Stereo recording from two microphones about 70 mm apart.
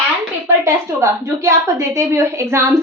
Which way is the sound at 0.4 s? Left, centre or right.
Right.